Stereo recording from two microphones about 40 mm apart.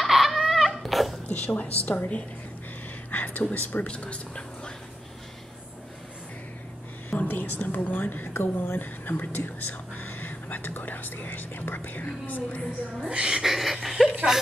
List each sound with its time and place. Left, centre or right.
0.0 s a sound: centre
1.3 s a woman's voice: left
3.1 s a sound: left
3.5 s speech: left
3.8 s speech: left
7.1 s a woman's voice: left
8.3 s speech: left
13.1 s speech: centre
13.4 s chuckle: centre